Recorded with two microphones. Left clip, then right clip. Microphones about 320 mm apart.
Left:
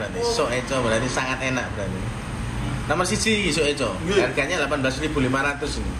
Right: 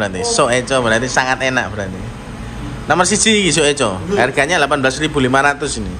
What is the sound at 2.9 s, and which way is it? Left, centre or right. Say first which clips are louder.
Speech: right 9 dB; centre.